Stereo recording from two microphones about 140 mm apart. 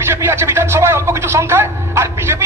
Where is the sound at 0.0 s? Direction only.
15° right (ahead or behind).